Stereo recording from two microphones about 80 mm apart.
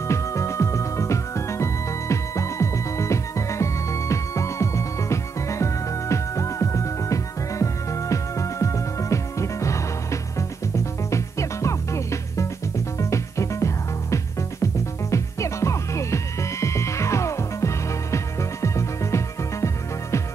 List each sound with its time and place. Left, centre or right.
0.1 s music: left
10.8 s music: left